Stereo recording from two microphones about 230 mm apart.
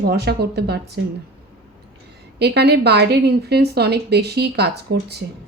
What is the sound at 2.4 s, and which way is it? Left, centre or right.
A woman's voice, right.